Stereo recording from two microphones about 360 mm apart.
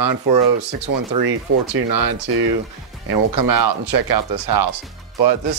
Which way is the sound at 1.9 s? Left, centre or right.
Right.